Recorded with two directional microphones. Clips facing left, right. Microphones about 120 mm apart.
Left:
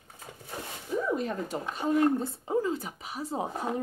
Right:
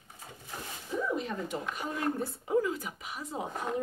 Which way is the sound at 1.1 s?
40° left (ahead or behind).